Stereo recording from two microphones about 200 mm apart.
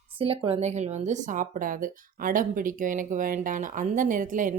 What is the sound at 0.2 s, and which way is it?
Speech, 30° right (ahead or behind).